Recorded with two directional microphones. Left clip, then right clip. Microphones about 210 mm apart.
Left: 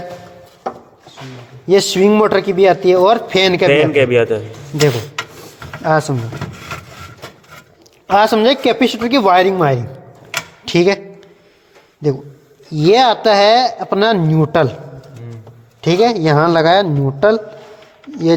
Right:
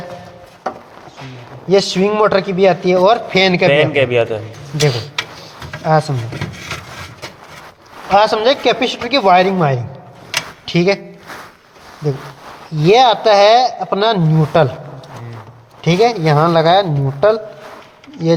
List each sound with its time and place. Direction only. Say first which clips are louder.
1.6 s a man's voice: left 2 dB; 45° left (ahead or behind)
5.8 s a man's voice: even; 45° left (ahead or behind)
8.1 s a man's voice: even; 45° left (ahead or behind)
12.7 s a man's voice: right 1 dB; 45° left (ahead or behind)
15.8 s a man's voice: even; 45° left (ahead or behind)